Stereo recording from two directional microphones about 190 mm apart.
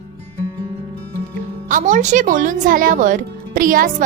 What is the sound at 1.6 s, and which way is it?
A woman's voice, 40° right (ahead or behind).